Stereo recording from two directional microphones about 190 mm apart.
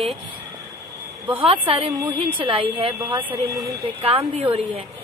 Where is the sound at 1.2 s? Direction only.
25° right (ahead or behind).